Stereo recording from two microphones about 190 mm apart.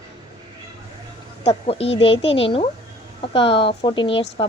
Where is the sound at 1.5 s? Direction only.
30° left (ahead or behind).